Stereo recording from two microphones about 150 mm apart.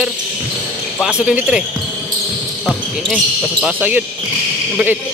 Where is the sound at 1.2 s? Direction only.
5° right (ahead or behind).